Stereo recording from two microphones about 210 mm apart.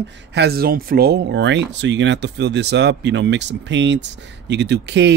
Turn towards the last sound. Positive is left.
turn(degrees=-55)  # may be behind; listen again after turning